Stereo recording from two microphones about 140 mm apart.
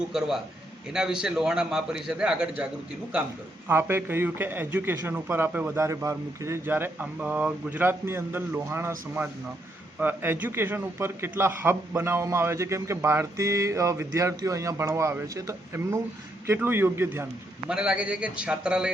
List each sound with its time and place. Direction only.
0.1 s a man's voice: 5° right (ahead or behind)
3.7 s a man's voice: 15° right (ahead or behind)
17.7 s a man's voice: 5° right (ahead or behind)